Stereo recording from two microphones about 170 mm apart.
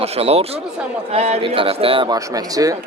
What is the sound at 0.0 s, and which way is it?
A man's voice, 35° right (ahead or behind).